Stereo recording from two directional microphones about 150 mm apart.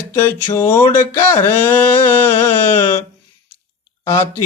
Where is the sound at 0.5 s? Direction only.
15° left (ahead or behind).